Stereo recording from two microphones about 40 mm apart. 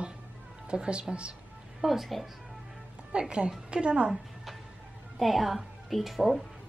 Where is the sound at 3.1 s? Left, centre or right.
Right.